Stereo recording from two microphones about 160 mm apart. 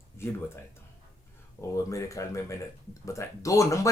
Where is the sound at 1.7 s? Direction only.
20° left (ahead or behind).